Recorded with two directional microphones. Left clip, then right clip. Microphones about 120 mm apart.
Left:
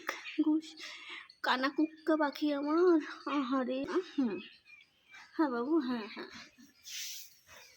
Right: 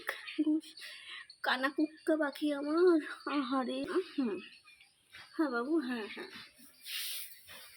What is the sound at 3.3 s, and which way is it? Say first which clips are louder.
Speech: left 1 dB; 5° left (ahead or behind).